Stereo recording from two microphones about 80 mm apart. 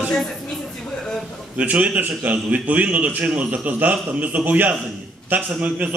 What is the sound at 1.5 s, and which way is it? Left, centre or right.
A man's voice, centre.